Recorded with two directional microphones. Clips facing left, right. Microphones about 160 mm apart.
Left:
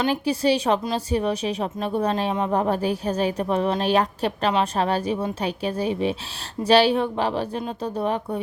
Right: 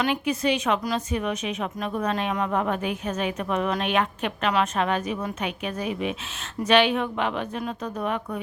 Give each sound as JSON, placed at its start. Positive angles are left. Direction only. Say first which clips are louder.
{"t": 0.0, "sound": "a woman's voice", "louder": "left 3 dB", "side_deg": 35}